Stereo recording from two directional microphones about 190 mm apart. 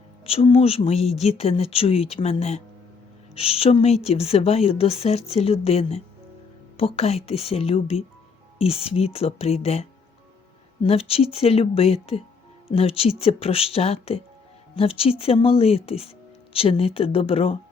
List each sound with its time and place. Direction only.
0.3 s speech: 30° left (ahead or behind)
10.8 s speech: 30° left (ahead or behind)